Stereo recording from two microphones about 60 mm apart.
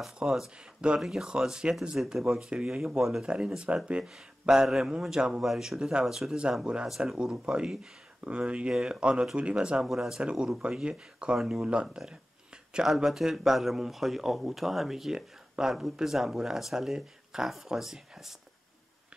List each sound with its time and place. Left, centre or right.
0.2 s speech: centre
4.0 s speech: centre
8.7 s speech: centre
11.3 s speech: centre
11.6 s speech: centre